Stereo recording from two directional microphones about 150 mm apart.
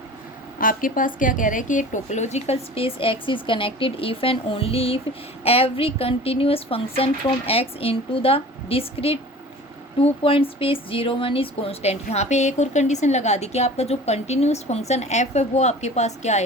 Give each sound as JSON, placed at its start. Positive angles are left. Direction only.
{"t": 0.6, "sound": "speech", "side_deg": 65}